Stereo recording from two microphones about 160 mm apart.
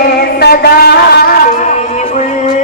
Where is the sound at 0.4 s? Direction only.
70° left (ahead or behind).